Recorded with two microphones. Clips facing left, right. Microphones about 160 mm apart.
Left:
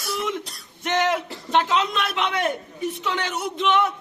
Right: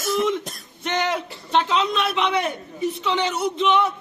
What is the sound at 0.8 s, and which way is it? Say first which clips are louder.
A man's voice: left 2 dB; centre (ahead or behind).